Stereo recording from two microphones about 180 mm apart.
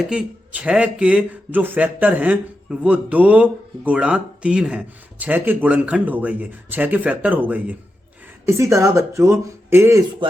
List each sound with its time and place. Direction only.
0.1 s speech: 5° right (ahead or behind)